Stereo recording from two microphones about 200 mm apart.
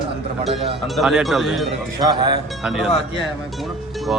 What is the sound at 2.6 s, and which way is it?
Speech, centre (ahead or behind).